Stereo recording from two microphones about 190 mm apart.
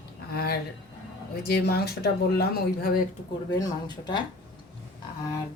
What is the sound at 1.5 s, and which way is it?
Speech, 55° left (ahead or behind).